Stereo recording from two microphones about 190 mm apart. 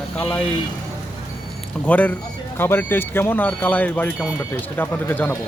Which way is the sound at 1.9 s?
10° left (ahead or behind).